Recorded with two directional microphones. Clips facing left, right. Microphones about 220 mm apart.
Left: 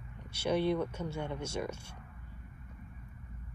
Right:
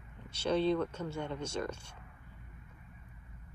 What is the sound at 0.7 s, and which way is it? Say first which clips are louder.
Speech: even; 10° left (ahead or behind).